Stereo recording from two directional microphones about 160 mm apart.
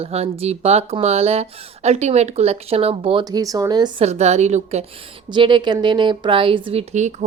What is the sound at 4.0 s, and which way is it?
Speech, 45° right (ahead or behind).